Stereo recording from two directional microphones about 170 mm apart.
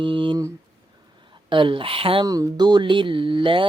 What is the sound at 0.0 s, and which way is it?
Speech, 30° right (ahead or behind).